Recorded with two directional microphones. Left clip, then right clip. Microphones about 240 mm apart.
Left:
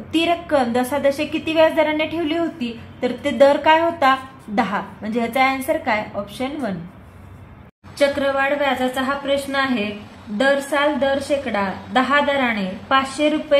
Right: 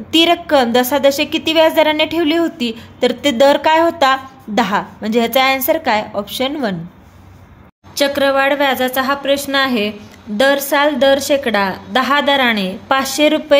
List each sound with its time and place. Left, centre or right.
0.1 s a woman's voice: right
8.0 s a woman's voice: right